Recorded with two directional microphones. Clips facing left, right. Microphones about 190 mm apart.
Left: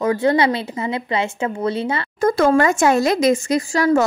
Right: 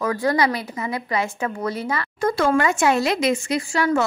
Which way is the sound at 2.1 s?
45° left (ahead or behind).